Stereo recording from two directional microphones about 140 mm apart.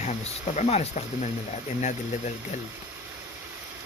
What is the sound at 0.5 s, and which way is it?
Speech, 50° left (ahead or behind).